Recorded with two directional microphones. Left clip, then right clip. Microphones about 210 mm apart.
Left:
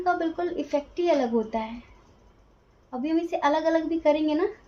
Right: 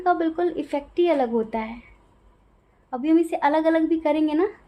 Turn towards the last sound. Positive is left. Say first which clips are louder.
# right 1 dB
turn(degrees=-50)  # may be behind; listen again after turning